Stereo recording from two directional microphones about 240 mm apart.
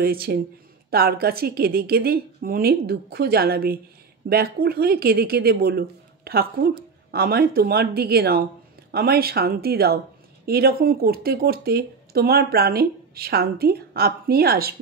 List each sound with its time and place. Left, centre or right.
0.0 s speech: right